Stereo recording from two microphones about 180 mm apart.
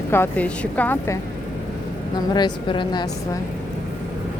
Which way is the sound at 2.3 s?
25° left (ahead or behind).